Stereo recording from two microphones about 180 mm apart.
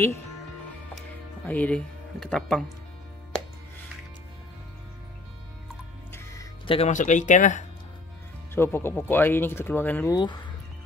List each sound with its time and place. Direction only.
1.4 s speech: 10° left (ahead or behind)
6.6 s speech: 30° left (ahead or behind)
6.9 s speech: 45° left (ahead or behind)
8.5 s speech: 10° left (ahead or behind)
10.1 s speech: 25° left (ahead or behind)